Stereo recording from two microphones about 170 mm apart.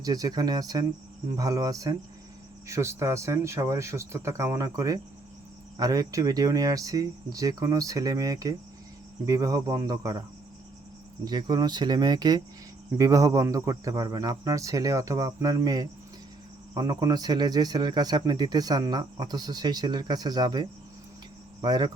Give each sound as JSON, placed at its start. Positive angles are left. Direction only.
{"t": 0.0, "sound": "speech", "side_deg": -20}
{"t": 11.3, "sound": "speech", "side_deg": -25}
{"t": 21.6, "sound": "cricket", "side_deg": -25}